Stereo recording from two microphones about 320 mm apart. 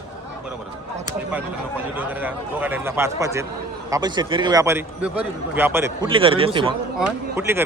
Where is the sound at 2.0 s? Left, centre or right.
Centre.